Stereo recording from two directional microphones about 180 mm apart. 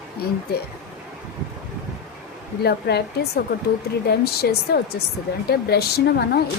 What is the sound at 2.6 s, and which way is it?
Speech, 65° left (ahead or behind).